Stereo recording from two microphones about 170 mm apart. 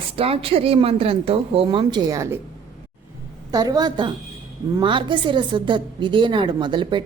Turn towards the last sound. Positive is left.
turn(degrees=-25)  # may be behind; listen again after turning